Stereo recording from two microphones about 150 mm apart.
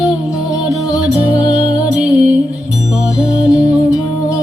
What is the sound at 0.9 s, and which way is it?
Music, 25° left (ahead or behind).